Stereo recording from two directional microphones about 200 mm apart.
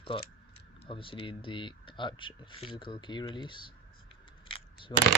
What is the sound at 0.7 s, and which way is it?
Speech, 25° left (ahead or behind).